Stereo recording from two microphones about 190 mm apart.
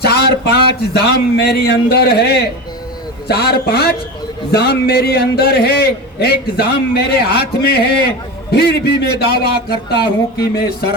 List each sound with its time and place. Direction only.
0.0 s a man's voice: 55° left (ahead or behind)